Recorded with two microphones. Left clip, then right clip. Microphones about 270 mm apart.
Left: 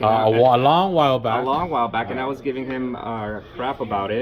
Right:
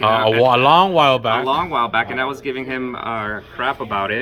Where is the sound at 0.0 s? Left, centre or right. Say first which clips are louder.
Right 2 dB; centre.